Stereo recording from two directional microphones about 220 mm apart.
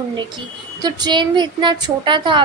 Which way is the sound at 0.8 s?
20° right (ahead or behind).